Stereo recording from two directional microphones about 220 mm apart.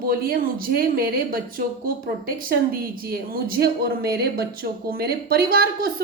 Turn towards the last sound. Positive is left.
turn(degrees=-45)  # may be behind; listen again after turning